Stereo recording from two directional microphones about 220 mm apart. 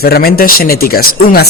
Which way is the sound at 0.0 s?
45° left (ahead or behind).